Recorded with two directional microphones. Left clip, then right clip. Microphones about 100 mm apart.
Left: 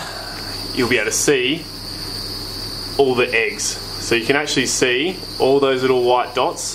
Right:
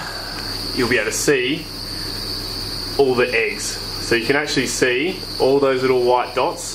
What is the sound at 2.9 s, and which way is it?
Speech, 50° left (ahead or behind).